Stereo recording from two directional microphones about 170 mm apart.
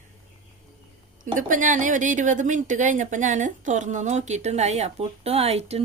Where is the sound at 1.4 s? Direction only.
50° right (ahead or behind).